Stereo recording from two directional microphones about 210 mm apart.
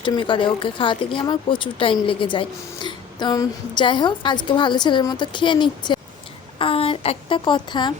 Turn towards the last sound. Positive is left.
turn(degrees=20)  # may be behind; listen again after turning